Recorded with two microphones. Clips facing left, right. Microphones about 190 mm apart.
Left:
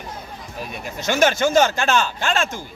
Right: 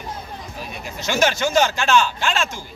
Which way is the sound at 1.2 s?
50° left (ahead or behind).